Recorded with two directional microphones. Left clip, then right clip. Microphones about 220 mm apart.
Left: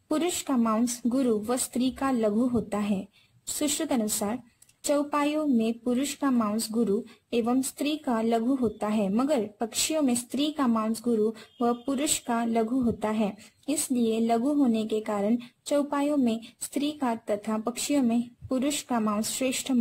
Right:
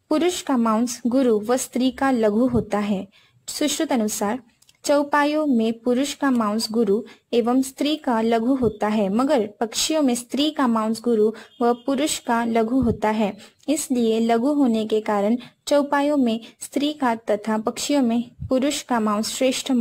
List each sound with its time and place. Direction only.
0.1 s speech: 15° right (ahead or behind)
1.0 s speech: 20° right (ahead or behind)